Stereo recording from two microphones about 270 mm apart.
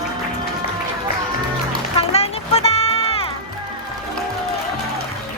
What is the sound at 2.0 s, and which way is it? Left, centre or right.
Music, left.